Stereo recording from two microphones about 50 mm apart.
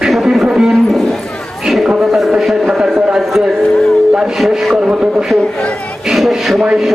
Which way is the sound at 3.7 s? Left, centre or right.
Centre.